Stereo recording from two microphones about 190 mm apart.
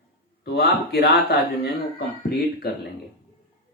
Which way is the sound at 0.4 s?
55° left (ahead or behind).